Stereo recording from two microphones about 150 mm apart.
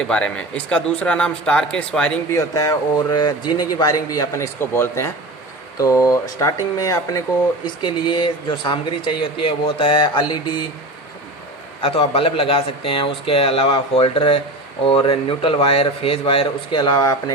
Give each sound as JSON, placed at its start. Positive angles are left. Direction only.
{"t": 0.0, "sound": "speech", "side_deg": 5}
{"t": 2.3, "sound": "a man's voice", "side_deg": 20}
{"t": 11.8, "sound": "speech", "side_deg": 40}